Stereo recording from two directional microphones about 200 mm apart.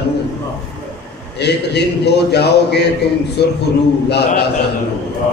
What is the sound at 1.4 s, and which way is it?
A man's voice, 55° left (ahead or behind).